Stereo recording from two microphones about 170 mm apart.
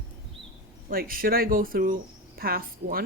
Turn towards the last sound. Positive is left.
turn(degrees=-60)  # may be behind; listen again after turning